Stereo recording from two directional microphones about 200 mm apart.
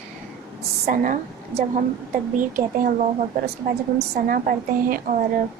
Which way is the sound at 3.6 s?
45° right (ahead or behind).